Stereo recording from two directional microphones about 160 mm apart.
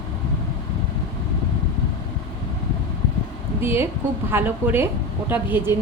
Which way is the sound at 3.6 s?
15° right (ahead or behind).